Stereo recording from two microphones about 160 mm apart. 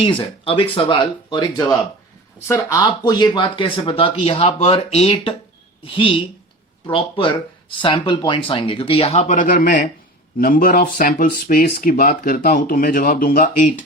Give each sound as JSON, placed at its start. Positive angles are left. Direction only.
{"t": 0.0, "sound": "speech", "side_deg": 35}